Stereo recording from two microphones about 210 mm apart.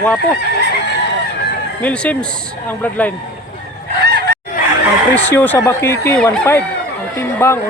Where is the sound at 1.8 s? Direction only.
5° left (ahead or behind).